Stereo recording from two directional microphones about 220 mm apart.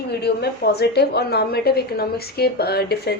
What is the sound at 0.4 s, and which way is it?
A woman's voice, 45° left (ahead or behind).